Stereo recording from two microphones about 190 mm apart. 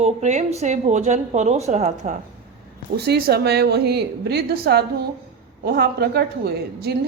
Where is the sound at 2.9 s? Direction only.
55° right (ahead or behind).